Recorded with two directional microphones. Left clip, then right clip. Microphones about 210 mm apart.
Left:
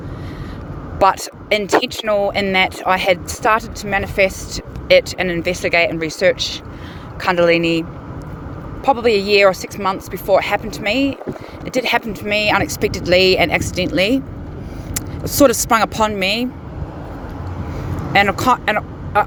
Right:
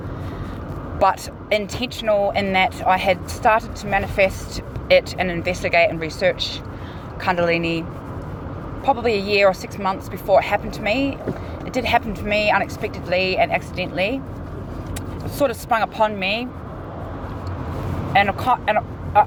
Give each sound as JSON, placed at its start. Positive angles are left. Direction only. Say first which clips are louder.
{"t": 0.9, "sound": "speech", "louder": "left 4 dB", "side_deg": 60}
{"t": 15.3, "sound": "speech", "louder": "left 7 dB", "side_deg": 70}
{"t": 18.1, "sound": "speech", "louder": "left 3 dB", "side_deg": 65}